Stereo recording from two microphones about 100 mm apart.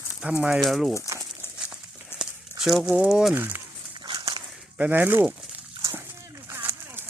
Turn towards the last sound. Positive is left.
turn(degrees=-25)  # may be behind; listen again after turning